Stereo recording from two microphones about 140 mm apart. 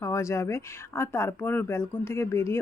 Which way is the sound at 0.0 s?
20° left (ahead or behind).